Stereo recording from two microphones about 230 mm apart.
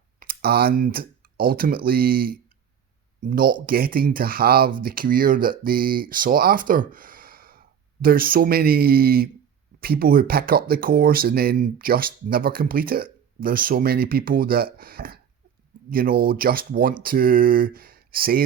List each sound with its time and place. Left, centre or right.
0.2 s speech: right